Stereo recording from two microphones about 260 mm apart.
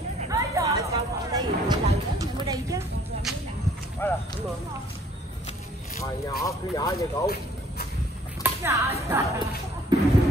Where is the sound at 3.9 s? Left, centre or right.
Centre.